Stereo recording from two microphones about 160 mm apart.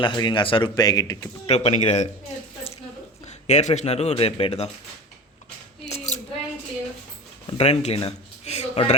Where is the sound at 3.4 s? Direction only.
45° left (ahead or behind).